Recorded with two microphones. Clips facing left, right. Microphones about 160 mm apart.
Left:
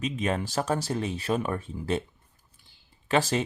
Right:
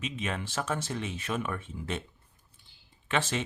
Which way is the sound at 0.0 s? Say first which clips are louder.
Left 6 dB; 40° left (ahead or behind).